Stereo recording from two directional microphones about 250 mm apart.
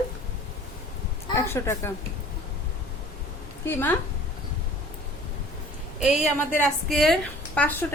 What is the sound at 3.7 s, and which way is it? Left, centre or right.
Speech, centre.